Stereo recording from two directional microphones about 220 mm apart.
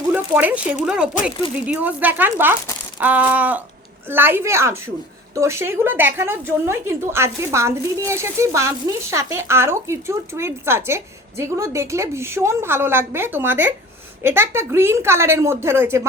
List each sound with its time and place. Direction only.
0.1 s speech: 5° right (ahead or behind)